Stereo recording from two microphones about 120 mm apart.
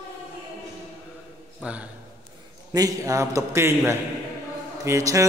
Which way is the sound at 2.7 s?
30° right (ahead or behind).